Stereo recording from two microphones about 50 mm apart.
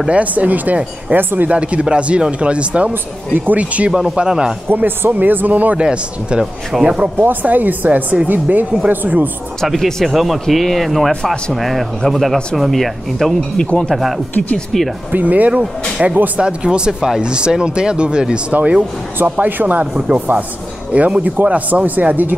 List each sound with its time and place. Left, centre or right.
0.1 s a man's voice: right
1.1 s a man's voice: right
1.5 s speech: right
2.9 s a man's voice: right
3.5 s speech: right
3.9 s speech: centre
4.6 s a man's voice: right
5.8 s speech: centre
7.2 s a man's voice: right
10.0 s speech: centre
15.0 s a man's voice: right
16.0 s speech: centre
18.5 s a man's voice: right